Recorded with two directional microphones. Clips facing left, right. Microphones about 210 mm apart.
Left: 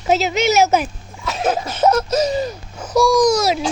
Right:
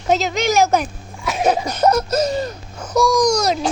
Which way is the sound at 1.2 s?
15° right (ahead or behind).